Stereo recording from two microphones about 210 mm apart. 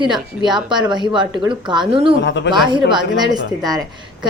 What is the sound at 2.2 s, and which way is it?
Speech, 60° left (ahead or behind).